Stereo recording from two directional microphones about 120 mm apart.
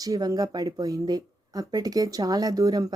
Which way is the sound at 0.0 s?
30° right (ahead or behind).